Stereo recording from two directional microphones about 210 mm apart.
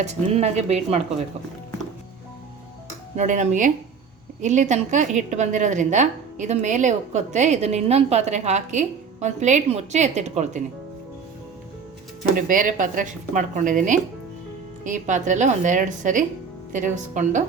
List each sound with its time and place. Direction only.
0.0 s a woman's voice: 35° right (ahead or behind)
3.2 s a woman's voice: 35° right (ahead or behind)
12.5 s a woman's voice: 40° right (ahead or behind)